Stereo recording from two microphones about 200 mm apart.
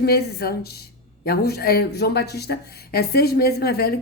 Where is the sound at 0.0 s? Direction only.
50° left (ahead or behind).